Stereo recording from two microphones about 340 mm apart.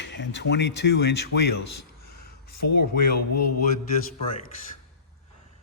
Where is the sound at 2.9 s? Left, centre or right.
Left.